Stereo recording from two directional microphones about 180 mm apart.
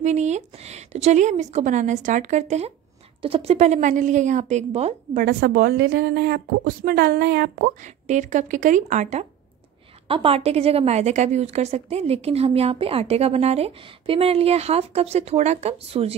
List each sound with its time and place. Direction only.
0.0 s a woman's voice: 40° right (ahead or behind)
5.2 s a woman's voice: 55° right (ahead or behind)
10.0 s a woman's voice: 30° right (ahead or behind)